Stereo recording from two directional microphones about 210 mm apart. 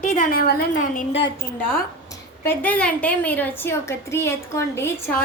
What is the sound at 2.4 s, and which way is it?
A woman's voice, 10° left (ahead or behind).